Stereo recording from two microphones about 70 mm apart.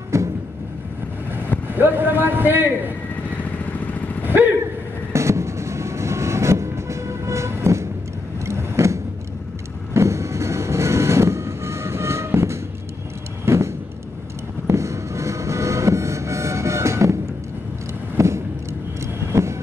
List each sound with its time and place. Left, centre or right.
0.1 s vehicle: right
1.3 s a man's voice: right
3.7 s vehicle: left
5.1 s train: right
8.5 s vehicle: right
9.9 s train: right
13.5 s vehicle: right
14.7 s music: right
18.1 s vehicle: right